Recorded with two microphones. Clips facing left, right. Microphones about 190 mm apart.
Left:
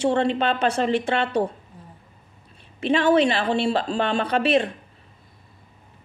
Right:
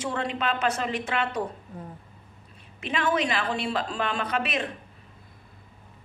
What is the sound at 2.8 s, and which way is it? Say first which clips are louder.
Speech: left 8 dB; 30° left (ahead or behind).